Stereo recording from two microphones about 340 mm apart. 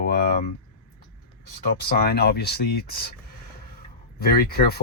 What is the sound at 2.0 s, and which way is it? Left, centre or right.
Speech, left.